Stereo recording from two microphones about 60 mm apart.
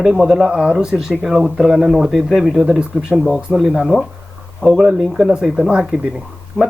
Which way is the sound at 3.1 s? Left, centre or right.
Centre.